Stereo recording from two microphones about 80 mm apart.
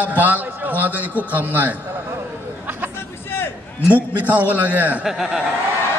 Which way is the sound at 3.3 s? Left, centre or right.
Left.